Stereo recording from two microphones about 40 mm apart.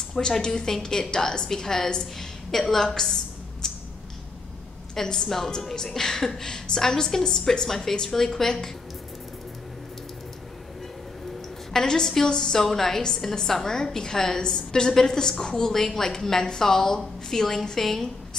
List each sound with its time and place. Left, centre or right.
0.1 s a woman's voice: centre
3.6 s a sound: centre
5.0 s a woman's voice: centre
5.6 s a woman's voice: centre
11.7 s a woman's voice: centre